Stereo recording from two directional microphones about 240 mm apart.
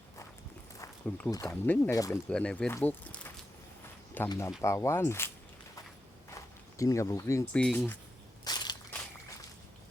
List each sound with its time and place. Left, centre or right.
0.8 s speech: centre
6.7 s speech: centre
8.4 s crushing: centre